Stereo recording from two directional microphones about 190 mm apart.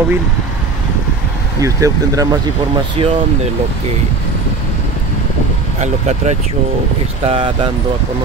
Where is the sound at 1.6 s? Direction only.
15° right (ahead or behind).